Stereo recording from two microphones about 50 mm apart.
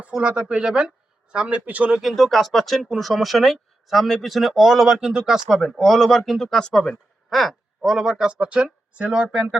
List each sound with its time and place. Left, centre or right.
0.0 s speech: right
2.0 s speech: centre
7.3 s owl: centre
7.9 s speech: centre
8.2 s speech: right
9.3 s speech: centre